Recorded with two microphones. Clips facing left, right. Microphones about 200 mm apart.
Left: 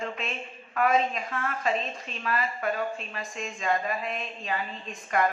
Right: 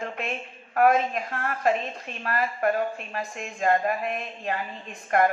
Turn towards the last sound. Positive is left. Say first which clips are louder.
# right 4 dB
turn(degrees=-55)  # may be behind; listen again after turning